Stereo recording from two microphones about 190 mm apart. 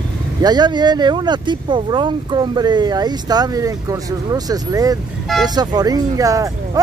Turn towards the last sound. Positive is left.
turn(degrees=-20)  # may be behind; listen again after turning